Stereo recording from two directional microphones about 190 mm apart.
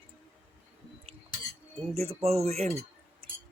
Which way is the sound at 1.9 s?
35° right (ahead or behind).